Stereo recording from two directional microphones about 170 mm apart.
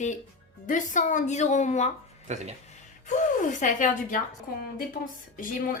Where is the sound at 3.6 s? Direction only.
50° left (ahead or behind).